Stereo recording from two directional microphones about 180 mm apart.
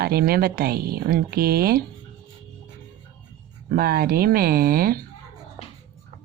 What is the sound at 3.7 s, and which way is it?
Speech, 60° right (ahead or behind).